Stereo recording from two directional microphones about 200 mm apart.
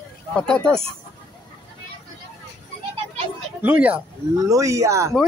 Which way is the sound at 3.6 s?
10° right (ahead or behind).